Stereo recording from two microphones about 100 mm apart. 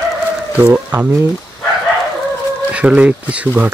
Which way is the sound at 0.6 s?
25° right (ahead or behind).